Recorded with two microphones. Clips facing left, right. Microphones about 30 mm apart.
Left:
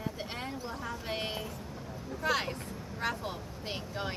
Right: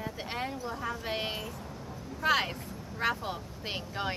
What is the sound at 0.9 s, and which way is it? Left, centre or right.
Speech, centre.